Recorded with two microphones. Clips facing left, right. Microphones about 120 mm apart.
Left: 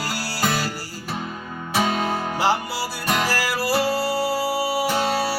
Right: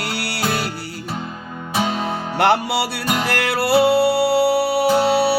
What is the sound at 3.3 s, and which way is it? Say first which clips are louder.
Music: right 5 dB; 65° right (ahead or behind).